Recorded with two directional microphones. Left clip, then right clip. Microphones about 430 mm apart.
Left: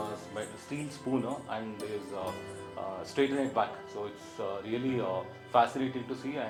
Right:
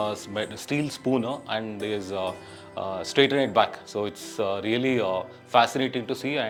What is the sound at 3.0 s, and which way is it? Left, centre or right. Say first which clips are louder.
Speech: right 9 dB; right.